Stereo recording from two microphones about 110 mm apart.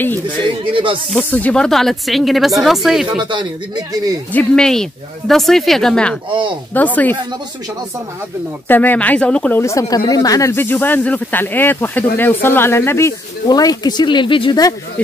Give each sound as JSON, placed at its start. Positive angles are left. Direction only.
{"t": 1.1, "sound": "speech", "side_deg": 10}
{"t": 3.3, "sound": "speech", "side_deg": -45}
{"t": 4.3, "sound": "speech", "side_deg": 10}
{"t": 6.7, "sound": "speech", "side_deg": 15}
{"t": 8.6, "sound": "speech", "side_deg": 15}
{"t": 9.6, "sound": "speech", "side_deg": 30}
{"t": 10.5, "sound": "speech", "side_deg": 20}
{"t": 13.5, "sound": "speech", "side_deg": 35}